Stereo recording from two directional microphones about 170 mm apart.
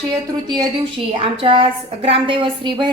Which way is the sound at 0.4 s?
25° right (ahead or behind).